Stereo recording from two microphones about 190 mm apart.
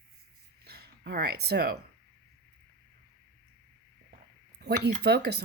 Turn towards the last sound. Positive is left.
turn(degrees=-60)  # may be behind; listen again after turning